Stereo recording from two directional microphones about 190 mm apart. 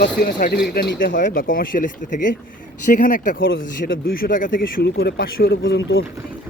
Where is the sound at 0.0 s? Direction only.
50° left (ahead or behind); by 6.1 s 75° left (ahead or behind).